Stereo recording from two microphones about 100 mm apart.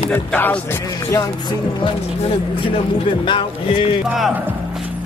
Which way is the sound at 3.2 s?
55° left (ahead or behind).